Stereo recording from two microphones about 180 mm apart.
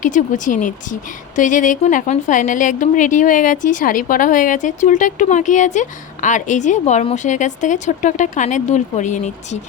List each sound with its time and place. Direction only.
0.0 s a woman's voice: 45° left (ahead or behind)